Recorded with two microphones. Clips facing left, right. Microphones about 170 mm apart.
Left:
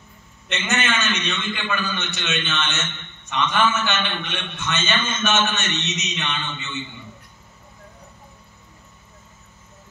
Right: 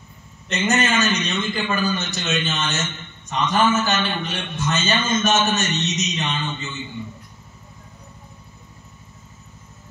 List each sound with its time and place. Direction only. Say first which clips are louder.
0.5 s a man's voice: right 4 dB; 40° right (ahead or behind)